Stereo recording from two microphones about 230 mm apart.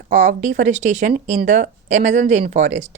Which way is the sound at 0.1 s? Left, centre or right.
Right.